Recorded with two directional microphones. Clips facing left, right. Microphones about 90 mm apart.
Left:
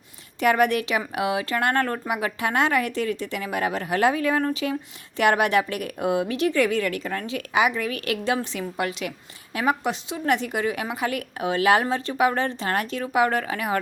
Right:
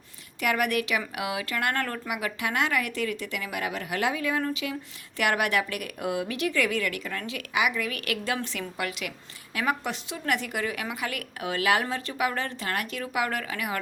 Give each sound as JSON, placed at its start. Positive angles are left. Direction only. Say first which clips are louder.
{"t": 0.3, "sound": "a woman's voice", "louder": "left 6 dB", "side_deg": 30}